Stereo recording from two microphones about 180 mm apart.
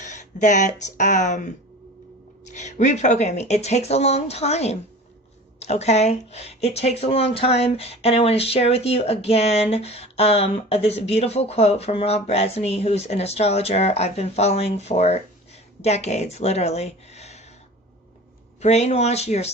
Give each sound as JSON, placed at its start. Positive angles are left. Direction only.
{"t": 0.0, "sound": "speech", "side_deg": 40}
{"t": 18.6, "sound": "speech", "side_deg": 40}